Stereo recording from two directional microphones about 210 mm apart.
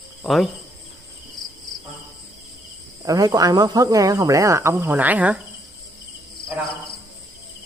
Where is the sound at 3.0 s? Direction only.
15° right (ahead or behind).